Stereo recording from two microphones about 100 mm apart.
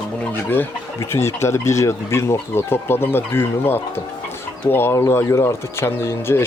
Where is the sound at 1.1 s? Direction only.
25° left (ahead or behind).